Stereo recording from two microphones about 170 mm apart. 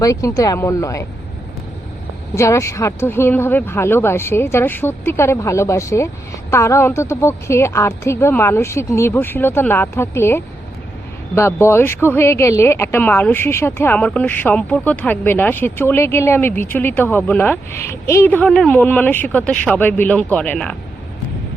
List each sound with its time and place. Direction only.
0.0 s speech: 20° left (ahead or behind)
2.3 s speech: 15° left (ahead or behind)